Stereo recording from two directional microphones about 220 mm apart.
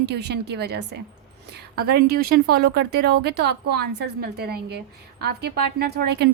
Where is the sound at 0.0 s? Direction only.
50° right (ahead or behind).